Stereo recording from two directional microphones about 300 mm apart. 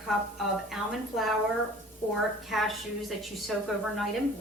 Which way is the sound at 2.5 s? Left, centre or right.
Centre.